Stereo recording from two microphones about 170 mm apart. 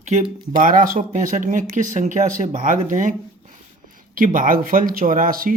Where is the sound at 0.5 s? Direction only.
55° right (ahead or behind).